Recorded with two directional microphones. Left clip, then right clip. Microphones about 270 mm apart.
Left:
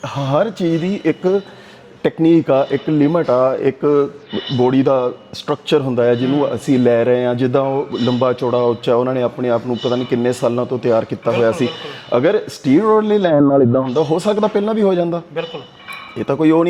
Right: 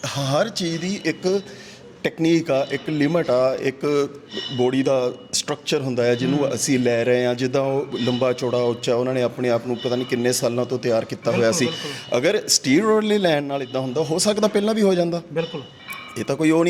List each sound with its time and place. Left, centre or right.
0.0 s a man's voice: centre
3.0 s a man's voice: centre